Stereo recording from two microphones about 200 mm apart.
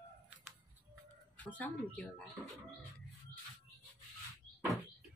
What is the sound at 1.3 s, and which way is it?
Speech, 5° left (ahead or behind).